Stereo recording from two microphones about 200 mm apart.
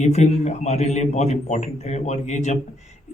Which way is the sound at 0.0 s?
35° left (ahead or behind).